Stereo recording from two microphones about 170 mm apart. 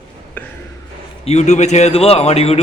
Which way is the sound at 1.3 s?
40° left (ahead or behind).